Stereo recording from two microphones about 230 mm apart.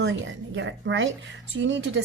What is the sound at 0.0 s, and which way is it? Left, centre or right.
Speech, right.